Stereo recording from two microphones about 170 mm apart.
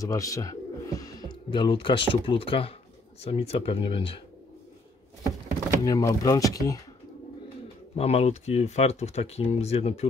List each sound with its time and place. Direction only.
0.0 s speech: 20° left (ahead or behind)
5.9 s speech: 20° left (ahead or behind)
7.9 s speech: 35° left (ahead or behind)